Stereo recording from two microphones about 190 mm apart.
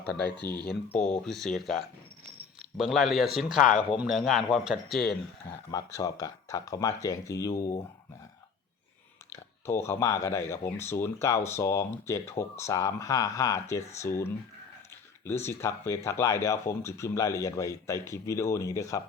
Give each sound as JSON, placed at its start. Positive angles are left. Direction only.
{"t": 0.0, "sound": "speech", "side_deg": 55}
{"t": 0.9, "sound": "speech", "side_deg": 5}
{"t": 3.6, "sound": "speech", "side_deg": 40}
{"t": 4.0, "sound": "speech", "side_deg": 0}
{"t": 5.5, "sound": "speech", "side_deg": 20}
{"t": 9.3, "sound": "speech", "side_deg": 15}